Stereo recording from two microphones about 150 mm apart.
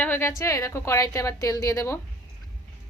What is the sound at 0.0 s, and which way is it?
A woman's voice, 15° left (ahead or behind).